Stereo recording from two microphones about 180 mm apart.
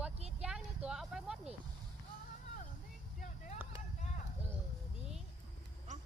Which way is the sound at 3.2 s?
40° left (ahead or behind).